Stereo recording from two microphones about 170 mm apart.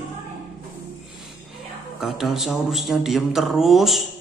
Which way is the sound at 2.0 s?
Centre (ahead or behind).